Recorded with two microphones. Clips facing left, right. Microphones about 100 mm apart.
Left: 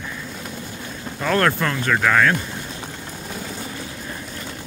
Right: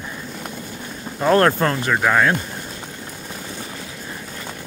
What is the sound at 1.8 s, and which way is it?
Speech, 20° right (ahead or behind).